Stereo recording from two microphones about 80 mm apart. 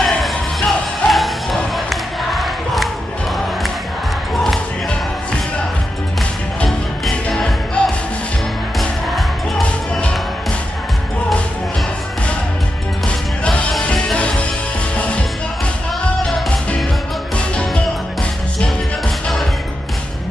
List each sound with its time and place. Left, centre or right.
0.0 s music: centre
2.3 s crowd: centre
6.6 s music: centre
9.7 s music: centre
13.4 s music: centre